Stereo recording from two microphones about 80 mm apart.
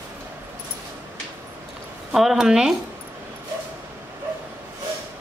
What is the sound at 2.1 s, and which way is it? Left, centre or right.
Speech, centre.